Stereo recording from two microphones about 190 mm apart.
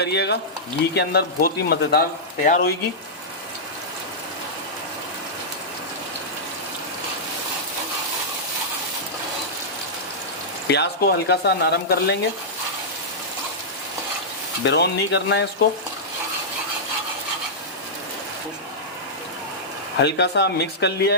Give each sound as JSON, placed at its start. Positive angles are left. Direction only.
{"t": 0.0, "sound": "speech", "side_deg": 60}
{"t": 10.7, "sound": "speech", "side_deg": 60}
{"t": 14.6, "sound": "speech", "side_deg": 65}
{"t": 20.0, "sound": "speech", "side_deg": 65}